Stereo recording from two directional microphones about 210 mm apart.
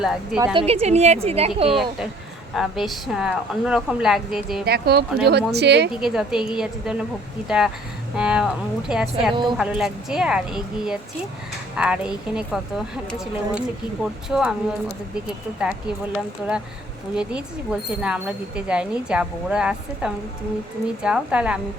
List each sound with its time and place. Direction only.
0.3 s speech: 15° right (ahead or behind)
0.6 s a woman's voice: 30° right (ahead or behind)
2.6 s speech: centre (ahead or behind)
4.6 s speech: 50° right (ahead or behind)
5.9 s speech: centre (ahead or behind)
17.2 s speech: 5° right (ahead or behind)